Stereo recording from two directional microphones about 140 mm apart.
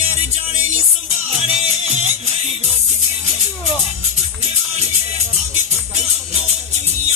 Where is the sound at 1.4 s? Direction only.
50° right (ahead or behind).